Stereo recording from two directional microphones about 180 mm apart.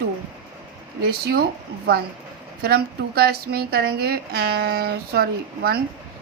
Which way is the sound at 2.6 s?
60° right (ahead or behind).